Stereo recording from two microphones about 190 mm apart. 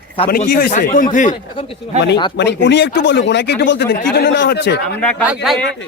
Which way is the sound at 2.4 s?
65° left (ahead or behind).